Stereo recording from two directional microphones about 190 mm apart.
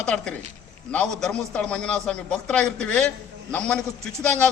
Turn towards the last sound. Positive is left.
turn(degrees=5)  # may be behind; listen again after turning